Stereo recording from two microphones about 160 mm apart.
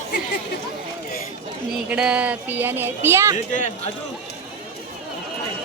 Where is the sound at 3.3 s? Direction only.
50° left (ahead or behind).